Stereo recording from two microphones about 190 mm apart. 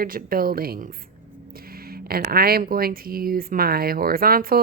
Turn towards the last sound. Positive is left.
turn(degrees=-50)  # may be behind; listen again after turning